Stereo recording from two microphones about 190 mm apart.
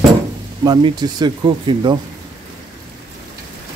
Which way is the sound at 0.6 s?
20° right (ahead or behind).